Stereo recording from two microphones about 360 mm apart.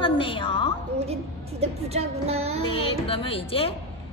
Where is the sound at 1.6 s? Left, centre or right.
Centre.